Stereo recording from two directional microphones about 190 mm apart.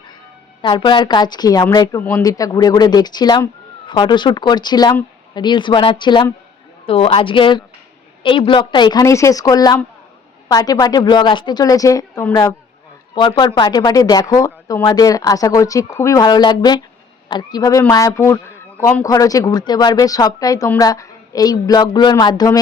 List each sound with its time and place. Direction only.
0.6 s speech: 25° left (ahead or behind)